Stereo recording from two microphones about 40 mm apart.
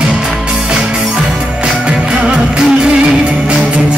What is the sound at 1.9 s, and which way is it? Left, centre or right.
Music, right.